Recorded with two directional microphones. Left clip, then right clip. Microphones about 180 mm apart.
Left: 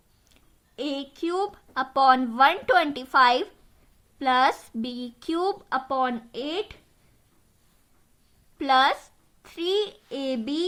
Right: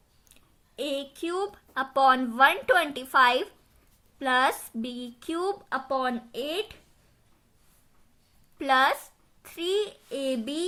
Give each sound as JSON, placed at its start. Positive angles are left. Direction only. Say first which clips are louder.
{"t": 0.3, "sound": "a woman's voice", "louder": "right 1 dB", "side_deg": 35}
{"t": 8.5, "sound": "a child's voice", "louder": "left 2 dB", "side_deg": 25}